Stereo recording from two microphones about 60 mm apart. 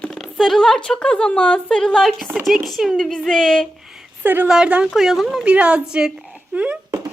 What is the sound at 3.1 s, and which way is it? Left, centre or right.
Speech, centre.